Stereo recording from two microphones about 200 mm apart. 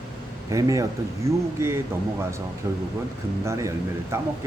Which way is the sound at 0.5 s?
15° right (ahead or behind).